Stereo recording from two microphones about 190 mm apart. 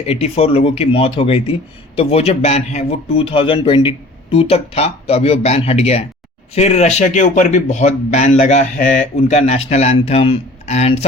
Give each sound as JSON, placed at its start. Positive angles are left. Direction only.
{"t": 0.0, "sound": "speech", "side_deg": 30}